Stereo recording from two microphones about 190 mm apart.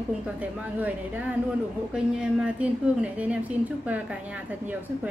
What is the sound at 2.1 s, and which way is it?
A woman's voice, 5° right (ahead or behind).